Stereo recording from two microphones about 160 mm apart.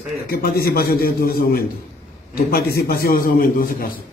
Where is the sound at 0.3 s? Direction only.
75° left (ahead or behind).